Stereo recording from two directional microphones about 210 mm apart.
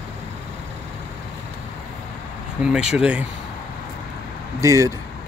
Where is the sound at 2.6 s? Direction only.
5° right (ahead or behind).